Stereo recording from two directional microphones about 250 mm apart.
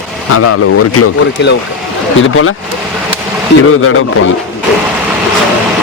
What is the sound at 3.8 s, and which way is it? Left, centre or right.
Speech, left.